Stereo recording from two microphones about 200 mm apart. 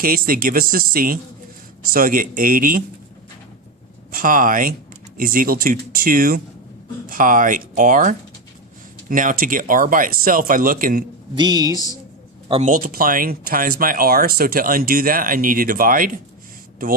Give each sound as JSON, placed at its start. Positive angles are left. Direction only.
{"t": 0.0, "sound": "speech", "side_deg": -45}
{"t": 4.1, "sound": "speech", "side_deg": -45}
{"t": 11.3, "sound": "speech", "side_deg": -20}
{"t": 12.5, "sound": "speech", "side_deg": -30}
{"t": 12.7, "sound": "speech", "side_deg": -45}